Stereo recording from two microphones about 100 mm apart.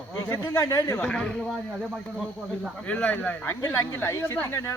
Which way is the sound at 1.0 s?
5° left (ahead or behind).